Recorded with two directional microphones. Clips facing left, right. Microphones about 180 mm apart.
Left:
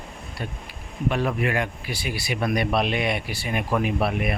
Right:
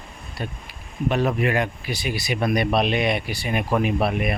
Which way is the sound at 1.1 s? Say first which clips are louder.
Right 3 dB; 25° right (ahead or behind).